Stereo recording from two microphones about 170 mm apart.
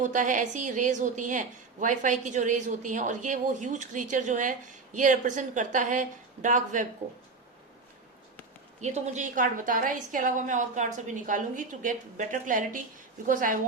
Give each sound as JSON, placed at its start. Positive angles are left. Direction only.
{"t": 0.0, "sound": "a woman's voice", "side_deg": -50}
{"t": 8.8, "sound": "a woman's voice", "side_deg": -45}